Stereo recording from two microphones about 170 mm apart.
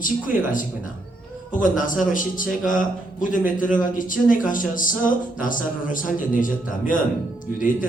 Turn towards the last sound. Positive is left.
turn(degrees=50)  # may be behind; listen again after turning